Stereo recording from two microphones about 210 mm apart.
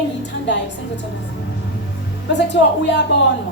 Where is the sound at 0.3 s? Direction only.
55° left (ahead or behind).